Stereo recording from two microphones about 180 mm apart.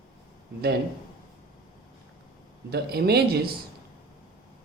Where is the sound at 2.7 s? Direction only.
60° right (ahead or behind).